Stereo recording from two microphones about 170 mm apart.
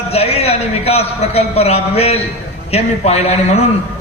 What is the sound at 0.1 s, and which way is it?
A man's voice, 35° left (ahead or behind).